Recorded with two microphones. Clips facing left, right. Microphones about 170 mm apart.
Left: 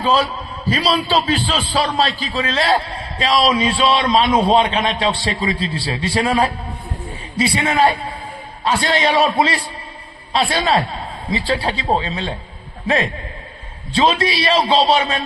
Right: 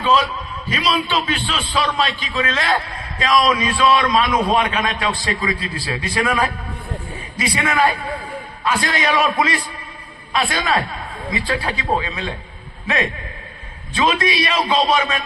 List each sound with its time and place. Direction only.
0.0 s a man's voice: 35° left (ahead or behind)